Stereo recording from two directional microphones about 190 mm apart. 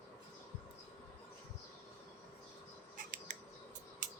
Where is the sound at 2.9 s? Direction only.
45° right (ahead or behind).